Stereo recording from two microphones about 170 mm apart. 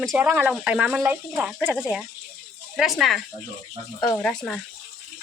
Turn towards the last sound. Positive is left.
turn(degrees=5)  # may be behind; listen again after turning